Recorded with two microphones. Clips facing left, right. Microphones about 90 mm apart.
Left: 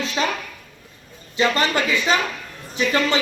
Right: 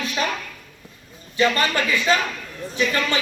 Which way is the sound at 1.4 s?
20° left (ahead or behind).